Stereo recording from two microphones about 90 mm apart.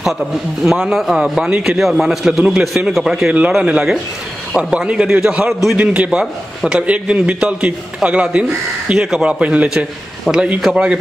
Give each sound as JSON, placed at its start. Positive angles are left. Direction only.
{"t": 0.0, "sound": "a man's voice", "side_deg": -5}
{"t": 3.3, "sound": "a man's voice", "side_deg": -15}